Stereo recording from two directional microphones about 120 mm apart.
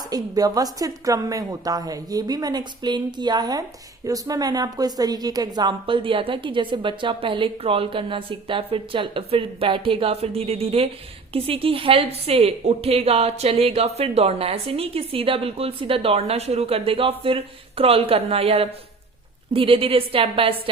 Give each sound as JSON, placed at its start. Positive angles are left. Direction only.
{"t": 0.1, "sound": "a woman's voice", "side_deg": -30}
{"t": 5.8, "sound": "a woman's voice", "side_deg": -45}